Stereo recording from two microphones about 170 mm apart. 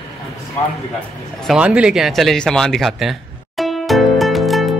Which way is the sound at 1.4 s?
5° right (ahead or behind).